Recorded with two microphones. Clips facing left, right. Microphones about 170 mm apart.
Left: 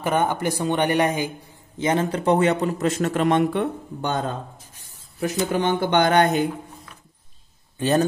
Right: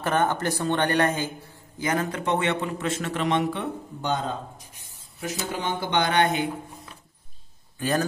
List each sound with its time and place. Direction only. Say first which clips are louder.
0.0 s speech: left 2 dB; 15° left (ahead or behind)
1.8 s a man's voice: left 5 dB; 25° left (ahead or behind); by 6.5 s 40° left (ahead or behind)